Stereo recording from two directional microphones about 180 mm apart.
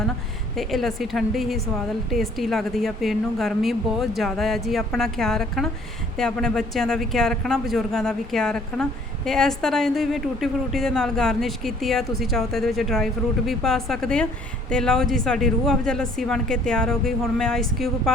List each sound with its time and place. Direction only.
0.5 s speech: centre (ahead or behind)